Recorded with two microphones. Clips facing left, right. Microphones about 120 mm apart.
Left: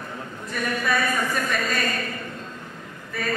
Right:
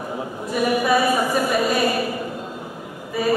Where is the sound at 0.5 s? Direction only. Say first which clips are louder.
Right 7 dB; 15° right (ahead or behind).